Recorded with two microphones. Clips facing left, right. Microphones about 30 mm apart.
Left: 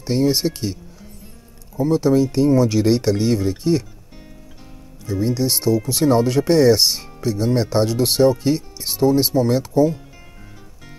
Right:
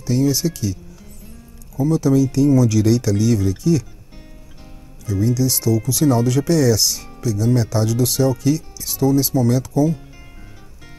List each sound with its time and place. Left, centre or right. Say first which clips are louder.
0.0 s speech: even; left
1.8 s speech: even; left
5.0 s speech: right 1 dB; left